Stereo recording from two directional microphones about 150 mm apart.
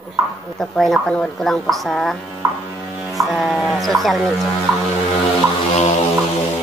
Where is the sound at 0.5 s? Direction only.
Centre (ahead or behind).